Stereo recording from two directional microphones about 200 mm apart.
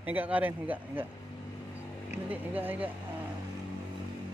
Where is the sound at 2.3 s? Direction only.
10° right (ahead or behind).